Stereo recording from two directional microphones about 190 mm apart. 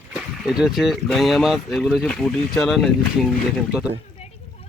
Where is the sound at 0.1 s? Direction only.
5° right (ahead or behind).